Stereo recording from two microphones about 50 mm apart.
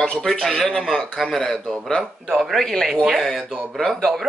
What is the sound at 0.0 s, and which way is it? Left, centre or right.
Speech, centre.